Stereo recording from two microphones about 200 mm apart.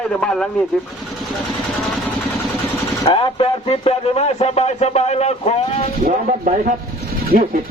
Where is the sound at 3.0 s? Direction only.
30° left (ahead or behind).